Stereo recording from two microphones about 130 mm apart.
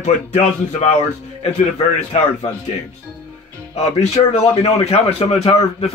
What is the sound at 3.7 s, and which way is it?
A man's voice, 55° left (ahead or behind).